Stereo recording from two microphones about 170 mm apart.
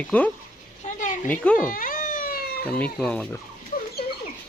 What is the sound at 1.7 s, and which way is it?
Cat, 55° left (ahead or behind).